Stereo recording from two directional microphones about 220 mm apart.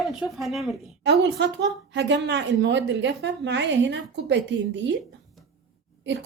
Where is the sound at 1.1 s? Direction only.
50° right (ahead or behind).